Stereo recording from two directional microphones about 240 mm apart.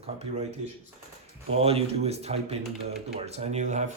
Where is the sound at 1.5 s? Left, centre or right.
Right.